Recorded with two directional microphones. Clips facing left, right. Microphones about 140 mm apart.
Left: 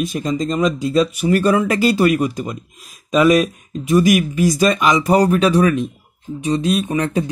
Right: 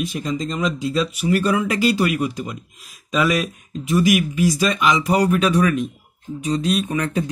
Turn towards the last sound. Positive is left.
turn(degrees=25)  # may be behind; listen again after turning